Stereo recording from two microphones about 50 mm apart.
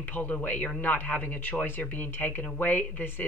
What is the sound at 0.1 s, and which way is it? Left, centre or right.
Speech, left.